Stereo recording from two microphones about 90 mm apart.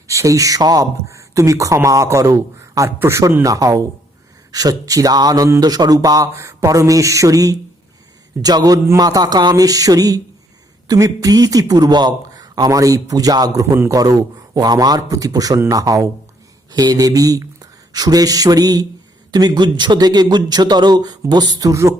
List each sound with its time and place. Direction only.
0.1 s speech: 35° right (ahead or behind)